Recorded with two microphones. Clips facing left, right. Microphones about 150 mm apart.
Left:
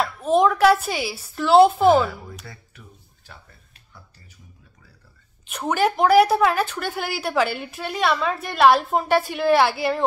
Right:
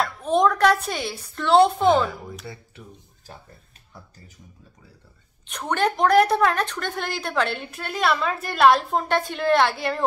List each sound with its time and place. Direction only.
0.0 s a woman's voice: 5° left (ahead or behind)
2.4 s speech: 25° right (ahead or behind)
5.5 s a woman's voice: 5° left (ahead or behind)